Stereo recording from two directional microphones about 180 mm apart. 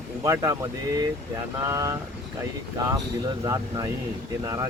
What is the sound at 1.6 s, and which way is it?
Speech, 15° right (ahead or behind).